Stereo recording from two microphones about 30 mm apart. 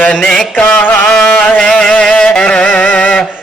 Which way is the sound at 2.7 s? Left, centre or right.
Left.